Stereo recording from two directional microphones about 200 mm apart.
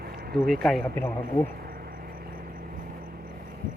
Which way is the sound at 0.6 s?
5° left (ahead or behind).